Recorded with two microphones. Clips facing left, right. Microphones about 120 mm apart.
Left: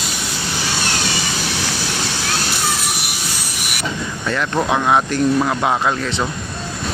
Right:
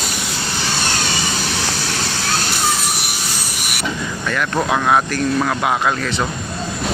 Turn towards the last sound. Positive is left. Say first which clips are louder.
# even
turn(degrees=20)  # may be behind; listen again after turning